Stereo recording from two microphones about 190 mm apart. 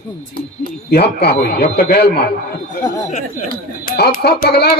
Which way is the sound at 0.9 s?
60° left (ahead or behind).